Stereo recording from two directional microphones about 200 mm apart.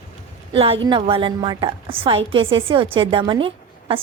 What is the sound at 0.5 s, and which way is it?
A woman's voice, 30° right (ahead or behind).